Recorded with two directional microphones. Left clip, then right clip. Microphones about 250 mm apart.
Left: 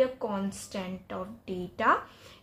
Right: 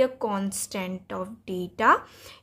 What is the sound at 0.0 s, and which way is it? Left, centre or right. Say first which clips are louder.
A woman's voice: right 4 dB; right.